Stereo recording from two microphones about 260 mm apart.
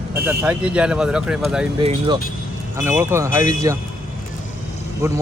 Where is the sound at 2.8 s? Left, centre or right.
Centre.